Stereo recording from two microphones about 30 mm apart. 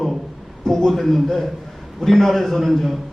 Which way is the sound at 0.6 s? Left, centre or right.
Centre.